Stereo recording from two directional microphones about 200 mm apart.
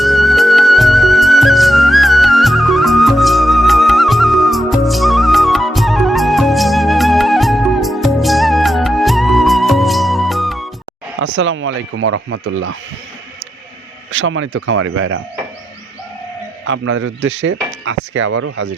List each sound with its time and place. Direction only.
0.0 s music: centre (ahead or behind)
11.2 s speech: 70° right (ahead or behind)
14.1 s speech: 70° right (ahead or behind); by 15.2 s 90° right
16.6 s speech: 75° right (ahead or behind)